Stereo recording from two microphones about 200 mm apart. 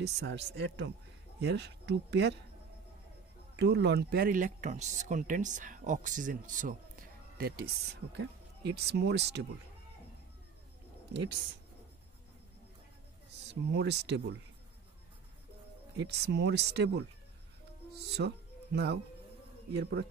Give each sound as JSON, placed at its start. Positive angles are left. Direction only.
{"t": 0.0, "sound": "speech", "side_deg": -60}
{"t": 3.5, "sound": "speech", "side_deg": -60}
{"t": 13.5, "sound": "speech", "side_deg": -60}
{"t": 16.0, "sound": "speech", "side_deg": -55}